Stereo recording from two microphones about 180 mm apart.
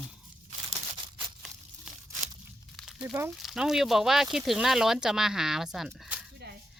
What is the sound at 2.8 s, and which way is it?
Crumpling, 5° right (ahead or behind).